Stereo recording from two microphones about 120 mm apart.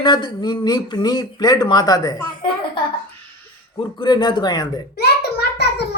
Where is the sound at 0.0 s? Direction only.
40° left (ahead or behind).